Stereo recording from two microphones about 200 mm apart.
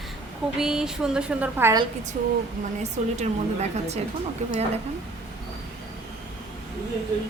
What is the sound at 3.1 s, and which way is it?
Speech, 35° right (ahead or behind).